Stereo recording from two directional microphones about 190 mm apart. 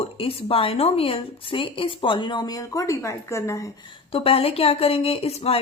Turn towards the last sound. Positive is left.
turn(degrees=35)  # may be behind; listen again after turning